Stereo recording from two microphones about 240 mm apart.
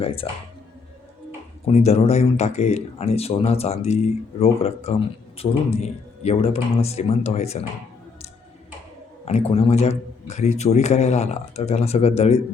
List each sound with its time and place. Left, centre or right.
0.0 s speech: left
1.6 s speech: left
9.2 s speech: left